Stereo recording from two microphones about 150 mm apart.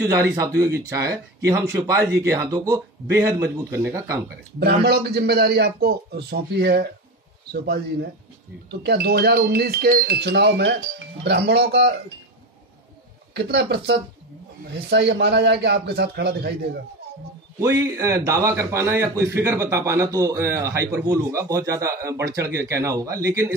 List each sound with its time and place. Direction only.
0.0 s a man's voice: 15° right (ahead or behind)
4.6 s a man's voice: 90° right
13.3 s a man's voice: 90° right
15.9 s a man's voice: 90° right
17.6 s a man's voice: 20° right (ahead or behind)